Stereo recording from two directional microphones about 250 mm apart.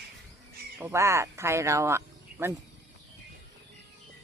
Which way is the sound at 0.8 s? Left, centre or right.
Centre.